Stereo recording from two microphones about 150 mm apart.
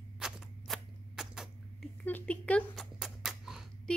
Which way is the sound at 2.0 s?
10° left (ahead or behind).